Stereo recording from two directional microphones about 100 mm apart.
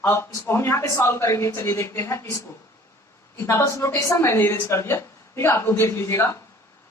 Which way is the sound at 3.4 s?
25° left (ahead or behind).